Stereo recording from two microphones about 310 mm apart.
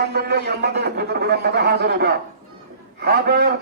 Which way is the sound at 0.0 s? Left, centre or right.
Right.